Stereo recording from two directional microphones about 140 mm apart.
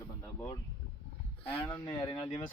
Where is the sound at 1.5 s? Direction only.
35° left (ahead or behind).